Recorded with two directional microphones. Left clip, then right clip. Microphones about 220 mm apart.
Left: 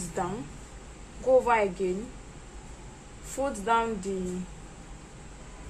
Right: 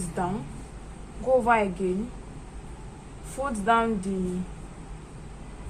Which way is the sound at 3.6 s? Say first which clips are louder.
Right 4 dB; 25° left (ahead or behind).